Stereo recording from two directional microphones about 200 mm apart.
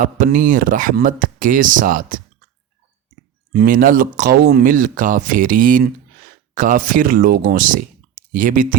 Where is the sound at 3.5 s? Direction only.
45° right (ahead or behind).